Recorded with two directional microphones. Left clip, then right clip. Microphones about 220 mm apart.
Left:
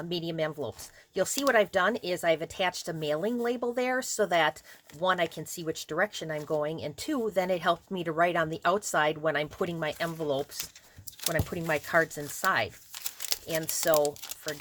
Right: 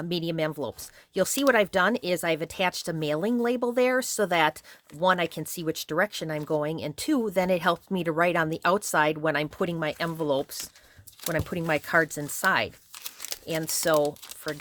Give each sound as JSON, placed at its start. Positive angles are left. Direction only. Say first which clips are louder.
{"t": 0.0, "sound": "speech", "louder": "right 3 dB", "side_deg": -50}